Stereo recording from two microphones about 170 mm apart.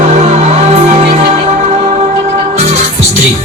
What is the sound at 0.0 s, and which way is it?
Music, 40° right (ahead or behind).